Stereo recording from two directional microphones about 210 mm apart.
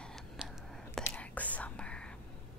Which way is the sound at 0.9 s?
5° left (ahead or behind).